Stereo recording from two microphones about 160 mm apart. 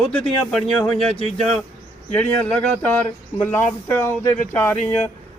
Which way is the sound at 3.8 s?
15° left (ahead or behind).